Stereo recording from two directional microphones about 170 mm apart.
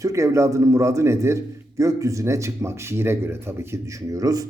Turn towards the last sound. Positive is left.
turn(degrees=-20)  # may be behind; listen again after turning